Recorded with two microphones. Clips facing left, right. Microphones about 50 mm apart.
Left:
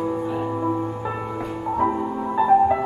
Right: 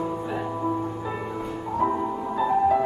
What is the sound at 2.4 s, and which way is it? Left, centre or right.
Music, left.